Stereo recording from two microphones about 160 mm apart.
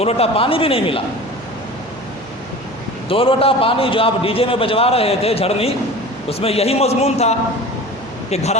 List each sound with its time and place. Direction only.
0.0 s a man's voice: 40° left (ahead or behind)
3.1 s a man's voice: 35° left (ahead or behind)